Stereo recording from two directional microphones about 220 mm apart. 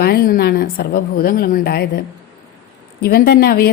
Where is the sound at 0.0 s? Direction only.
45° left (ahead or behind).